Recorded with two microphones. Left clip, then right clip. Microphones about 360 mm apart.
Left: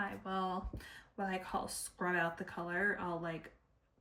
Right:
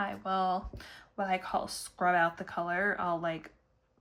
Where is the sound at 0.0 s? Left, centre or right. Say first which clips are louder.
Right 8 dB; centre.